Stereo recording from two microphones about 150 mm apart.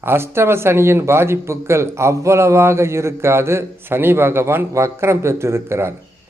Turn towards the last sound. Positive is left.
turn(degrees=-15)  # may be behind; listen again after turning